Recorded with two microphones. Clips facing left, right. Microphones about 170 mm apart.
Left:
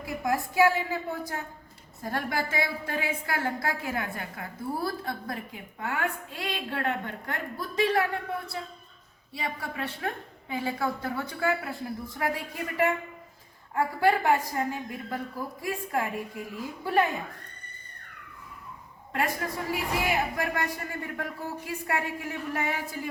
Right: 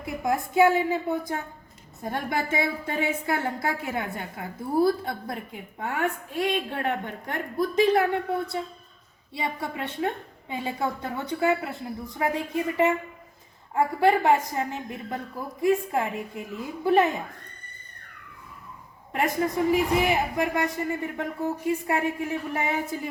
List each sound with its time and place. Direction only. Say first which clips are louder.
0.0 s a woman's voice: right 2 dB; 25° right (ahead or behind)
9.3 s a woman's voice: right 4 dB; 25° right (ahead or behind)
19.1 s a woman's voice: right 5 dB; 25° right (ahead or behind)